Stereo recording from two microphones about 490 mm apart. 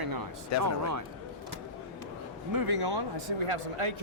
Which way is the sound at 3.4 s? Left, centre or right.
Right.